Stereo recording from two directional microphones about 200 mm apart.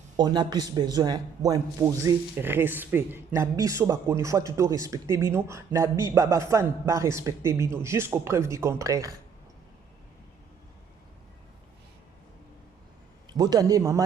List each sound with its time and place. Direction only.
0.2 s speech: 20° right (ahead or behind)
13.3 s speech: 20° right (ahead or behind)